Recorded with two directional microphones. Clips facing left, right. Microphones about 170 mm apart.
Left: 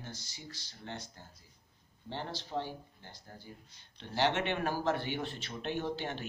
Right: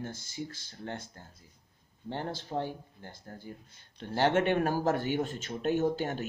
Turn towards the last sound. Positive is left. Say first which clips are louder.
# right 7 dB
turn(degrees=-45)  # may be behind; listen again after turning